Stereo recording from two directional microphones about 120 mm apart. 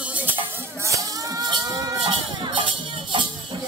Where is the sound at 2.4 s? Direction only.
50° right (ahead or behind).